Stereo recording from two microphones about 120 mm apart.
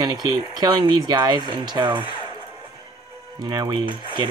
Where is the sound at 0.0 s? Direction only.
35° right (ahead or behind).